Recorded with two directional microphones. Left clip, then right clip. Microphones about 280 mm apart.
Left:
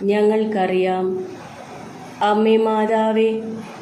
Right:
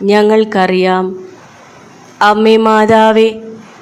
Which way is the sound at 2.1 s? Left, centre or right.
Right.